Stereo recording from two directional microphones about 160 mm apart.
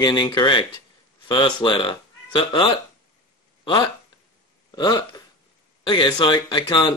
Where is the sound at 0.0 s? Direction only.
25° left (ahead or behind).